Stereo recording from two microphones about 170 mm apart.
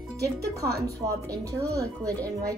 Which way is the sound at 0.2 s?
20° right (ahead or behind).